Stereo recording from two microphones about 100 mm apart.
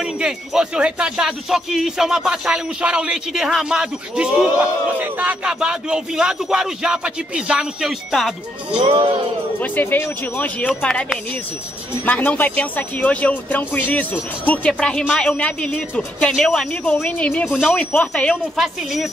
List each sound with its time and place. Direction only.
0.0 s speech: 5° right (ahead or behind)
8.7 s music: 60° right (ahead or behind)
9.6 s speech: 20° left (ahead or behind)
17.5 s a woman's voice: centre (ahead or behind)
17.7 s speech: 10° left (ahead or behind)
18.3 s a woman's voice: centre (ahead or behind)